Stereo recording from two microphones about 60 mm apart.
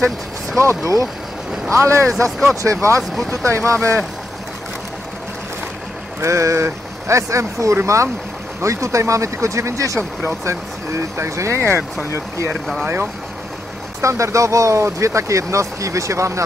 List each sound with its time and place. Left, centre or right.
0.6 s speech: right
3.0 s speech: centre
3.4 s speech: right
6.2 s speech: right
10.2 s speech: right
12.8 s speech: right
14.0 s speech: right